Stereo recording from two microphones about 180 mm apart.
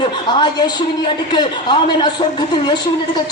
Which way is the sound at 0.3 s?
25° left (ahead or behind).